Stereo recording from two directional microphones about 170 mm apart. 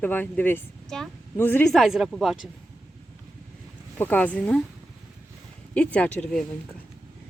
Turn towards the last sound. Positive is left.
turn(degrees=5)  # may be behind; listen again after turning